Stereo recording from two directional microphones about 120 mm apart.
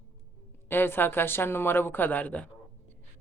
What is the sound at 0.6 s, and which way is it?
Speech, 20° left (ahead or behind).